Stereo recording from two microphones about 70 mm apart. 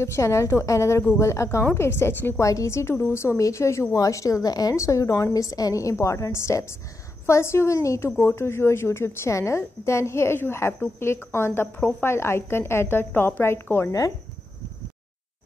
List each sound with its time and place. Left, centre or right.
0.0 s a woman's voice: left
4.7 s a woman's voice: left